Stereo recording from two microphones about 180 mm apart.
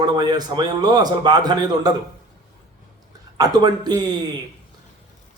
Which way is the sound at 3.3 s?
20° right (ahead or behind).